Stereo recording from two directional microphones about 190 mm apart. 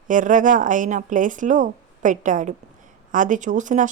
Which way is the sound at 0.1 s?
45° right (ahead or behind).